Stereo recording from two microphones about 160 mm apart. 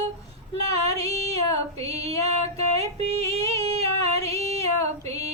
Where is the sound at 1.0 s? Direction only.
40° right (ahead or behind).